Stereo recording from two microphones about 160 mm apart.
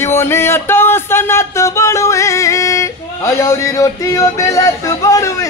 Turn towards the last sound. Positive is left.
turn(degrees=20)  # may be behind; listen again after turning